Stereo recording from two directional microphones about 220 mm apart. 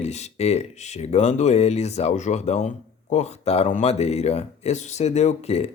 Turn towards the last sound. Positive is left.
turn(degrees=30)  # may be behind; listen again after turning